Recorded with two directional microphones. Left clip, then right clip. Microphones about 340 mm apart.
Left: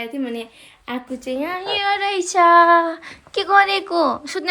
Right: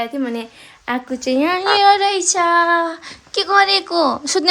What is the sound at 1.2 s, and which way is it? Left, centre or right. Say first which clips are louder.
Speech: right 8 dB; right.